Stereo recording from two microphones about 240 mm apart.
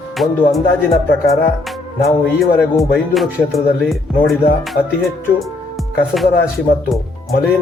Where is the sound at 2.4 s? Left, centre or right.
Centre.